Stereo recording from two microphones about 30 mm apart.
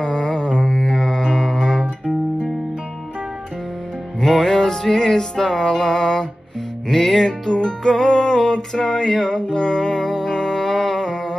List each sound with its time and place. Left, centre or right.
0.0 s mantra: left
1.3 s music: centre
4.2 s music: centre